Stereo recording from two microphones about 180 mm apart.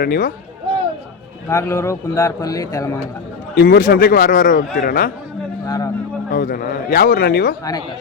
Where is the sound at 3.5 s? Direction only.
55° left (ahead or behind).